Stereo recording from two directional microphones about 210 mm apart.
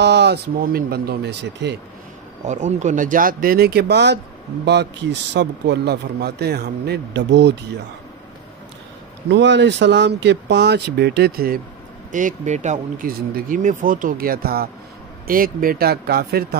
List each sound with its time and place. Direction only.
0.0 s speech: 55° right (ahead or behind)
2.4 s speech: 35° right (ahead or behind); by 4.2 s 55° right (ahead or behind)
5.3 s speech: 55° right (ahead or behind)
9.3 s speech: 55° right (ahead or behind)